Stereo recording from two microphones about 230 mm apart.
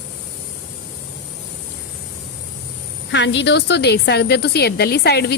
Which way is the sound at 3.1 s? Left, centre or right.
Left.